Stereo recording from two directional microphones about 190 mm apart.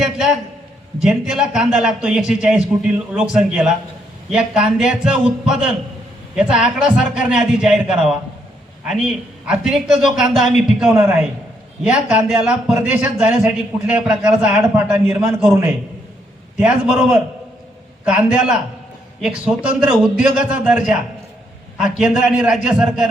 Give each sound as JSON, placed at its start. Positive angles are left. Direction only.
{"t": 0.0, "sound": "a man's voice", "side_deg": 0}
{"t": 10.9, "sound": "a man's voice", "side_deg": -15}
{"t": 16.6, "sound": "a man's voice", "side_deg": -5}